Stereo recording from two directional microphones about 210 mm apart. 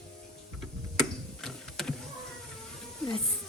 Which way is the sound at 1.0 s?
Centre (ahead or behind).